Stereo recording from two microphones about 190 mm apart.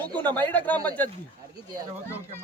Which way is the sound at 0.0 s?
10° left (ahead or behind).